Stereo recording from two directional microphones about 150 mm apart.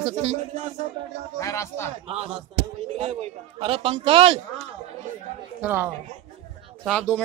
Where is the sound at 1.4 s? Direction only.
20° left (ahead or behind).